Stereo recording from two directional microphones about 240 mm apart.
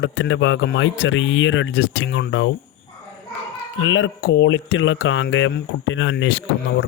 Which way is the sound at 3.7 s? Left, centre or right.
Left.